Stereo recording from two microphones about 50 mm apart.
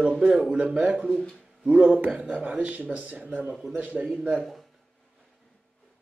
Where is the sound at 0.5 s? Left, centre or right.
Right.